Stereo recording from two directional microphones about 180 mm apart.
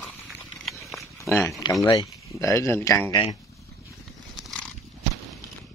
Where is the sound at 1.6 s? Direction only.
20° left (ahead or behind).